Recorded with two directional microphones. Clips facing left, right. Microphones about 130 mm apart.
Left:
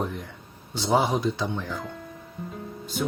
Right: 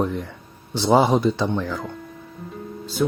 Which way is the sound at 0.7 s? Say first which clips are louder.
Right 6 dB; 80° right.